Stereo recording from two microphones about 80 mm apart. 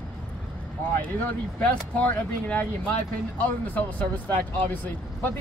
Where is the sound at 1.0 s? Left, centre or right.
Centre.